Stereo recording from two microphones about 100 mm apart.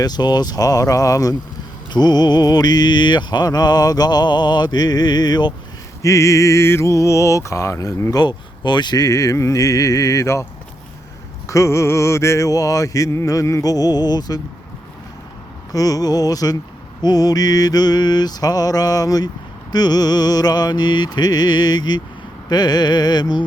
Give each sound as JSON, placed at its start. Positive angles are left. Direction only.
{"t": 0.0, "sound": "mantra", "side_deg": 45}
{"t": 6.0, "sound": "mantra", "side_deg": 30}
{"t": 8.1, "sound": "mantra", "side_deg": 45}
{"t": 11.4, "sound": "mantra", "side_deg": 30}
{"t": 15.7, "sound": "mantra", "side_deg": 35}